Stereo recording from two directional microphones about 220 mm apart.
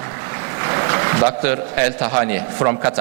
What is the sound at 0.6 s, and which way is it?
A man's voice, 20° right (ahead or behind).